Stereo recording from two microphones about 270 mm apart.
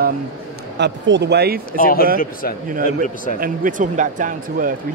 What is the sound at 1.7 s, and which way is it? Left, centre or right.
Speech, left.